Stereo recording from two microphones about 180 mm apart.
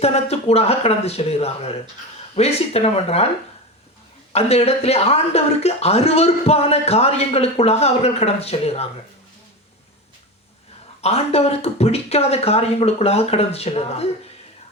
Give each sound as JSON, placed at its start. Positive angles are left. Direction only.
{"t": 0.0, "sound": "speech", "side_deg": 35}
{"t": 4.3, "sound": "speech", "side_deg": 35}
{"t": 11.0, "sound": "speech", "side_deg": 35}